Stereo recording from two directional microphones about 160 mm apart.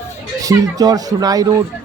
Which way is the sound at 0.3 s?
20° right (ahead or behind).